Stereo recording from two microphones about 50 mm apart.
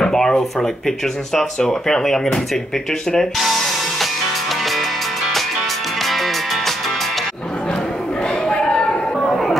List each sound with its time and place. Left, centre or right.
0.0 s speech: centre
3.3 s music: centre
7.6 s chatter: centre